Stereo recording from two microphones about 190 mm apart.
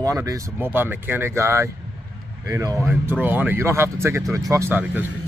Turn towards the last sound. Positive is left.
turn(degrees=-10)  # may be behind; listen again after turning